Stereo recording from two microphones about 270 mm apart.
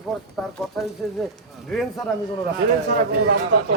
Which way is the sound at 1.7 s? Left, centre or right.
Centre.